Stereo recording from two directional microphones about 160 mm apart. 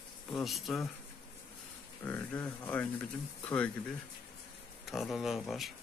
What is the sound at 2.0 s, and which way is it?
Speech, 10° left (ahead or behind).